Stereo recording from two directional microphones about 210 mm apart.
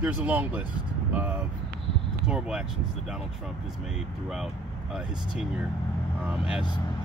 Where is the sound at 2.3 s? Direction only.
5° right (ahead or behind).